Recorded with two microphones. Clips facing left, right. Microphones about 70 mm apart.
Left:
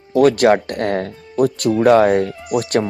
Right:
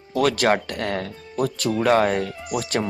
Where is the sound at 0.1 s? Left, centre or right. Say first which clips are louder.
Left 7 dB; left.